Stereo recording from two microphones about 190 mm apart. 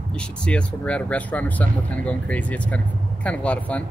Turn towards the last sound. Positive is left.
turn(degrees=5)  # may be behind; listen again after turning